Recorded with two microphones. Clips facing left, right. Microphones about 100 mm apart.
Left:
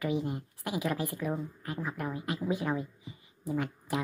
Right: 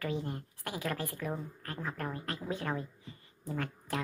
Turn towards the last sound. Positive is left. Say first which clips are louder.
# left 4 dB
turn(degrees=15)  # may be behind; listen again after turning